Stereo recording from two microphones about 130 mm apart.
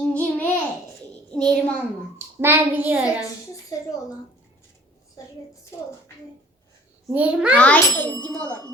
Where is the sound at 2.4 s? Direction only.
15° right (ahead or behind).